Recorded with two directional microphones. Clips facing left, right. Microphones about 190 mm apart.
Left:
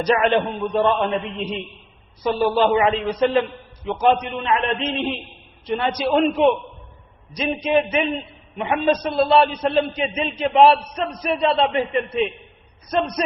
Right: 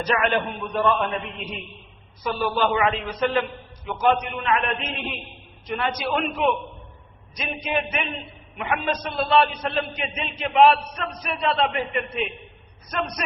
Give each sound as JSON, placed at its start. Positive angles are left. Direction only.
{"t": 0.0, "sound": "a man's voice", "side_deg": 30}